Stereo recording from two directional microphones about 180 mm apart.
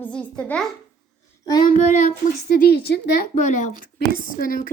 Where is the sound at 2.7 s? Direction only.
65° left (ahead or behind).